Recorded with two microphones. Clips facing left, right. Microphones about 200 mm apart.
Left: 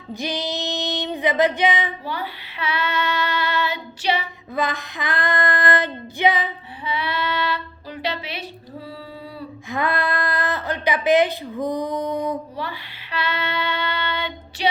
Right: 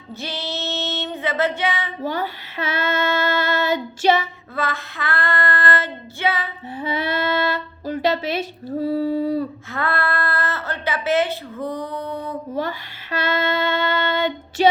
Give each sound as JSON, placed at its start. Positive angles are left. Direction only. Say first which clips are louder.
{"t": 0.1, "sound": "female singing", "louder": "left 3 dB", "side_deg": 15}
{"t": 2.0, "sound": "speech", "louder": "right 5 dB", "side_deg": -45}
{"t": 4.5, "sound": "speech", "louder": "left 2 dB", "side_deg": 15}
{"t": 6.7, "sound": "speech", "louder": "right 4 dB", "side_deg": -45}
{"t": 9.6, "sound": "speech", "louder": "left 1 dB", "side_deg": 15}
{"t": 12.5, "sound": "speech", "louder": "right 5 dB", "side_deg": -45}